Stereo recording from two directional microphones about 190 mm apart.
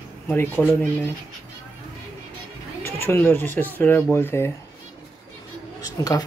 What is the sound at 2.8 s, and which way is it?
Speech, 10° left (ahead or behind).